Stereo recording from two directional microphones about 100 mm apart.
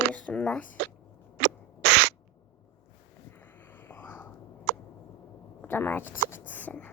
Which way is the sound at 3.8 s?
20° left (ahead or behind).